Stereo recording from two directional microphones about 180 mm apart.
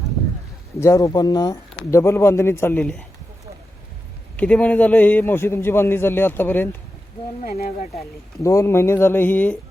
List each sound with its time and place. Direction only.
0.8 s a man's voice: 15° left (ahead or behind)
4.4 s a man's voice: 5° left (ahead or behind)
7.4 s speech: 45° left (ahead or behind)
8.4 s a man's voice: 15° left (ahead or behind)